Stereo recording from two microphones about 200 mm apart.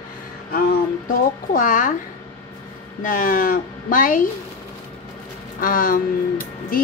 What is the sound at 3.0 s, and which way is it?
Speech, 45° left (ahead or behind).